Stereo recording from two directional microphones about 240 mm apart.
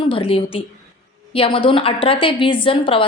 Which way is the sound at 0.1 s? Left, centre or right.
Left.